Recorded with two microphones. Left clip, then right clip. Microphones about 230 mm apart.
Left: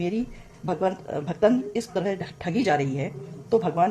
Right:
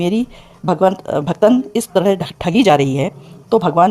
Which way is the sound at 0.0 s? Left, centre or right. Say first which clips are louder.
Right 10 dB; right.